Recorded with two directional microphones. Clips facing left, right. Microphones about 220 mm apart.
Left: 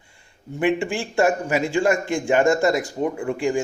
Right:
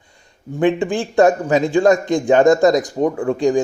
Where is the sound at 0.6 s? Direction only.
20° right (ahead or behind).